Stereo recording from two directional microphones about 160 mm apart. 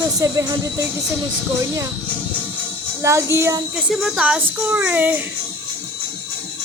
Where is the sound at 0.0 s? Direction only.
20° right (ahead or behind).